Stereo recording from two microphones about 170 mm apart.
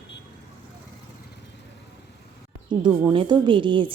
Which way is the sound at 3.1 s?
25° right (ahead or behind).